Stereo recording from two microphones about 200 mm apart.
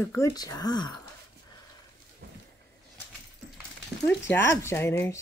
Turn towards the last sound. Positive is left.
turn(degrees=15)  # may be behind; listen again after turning